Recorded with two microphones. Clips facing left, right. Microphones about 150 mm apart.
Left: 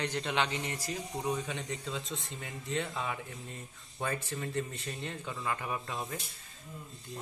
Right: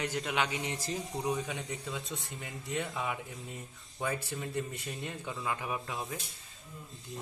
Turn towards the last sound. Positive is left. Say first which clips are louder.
# even
turn(degrees=-10)  # may be behind; listen again after turning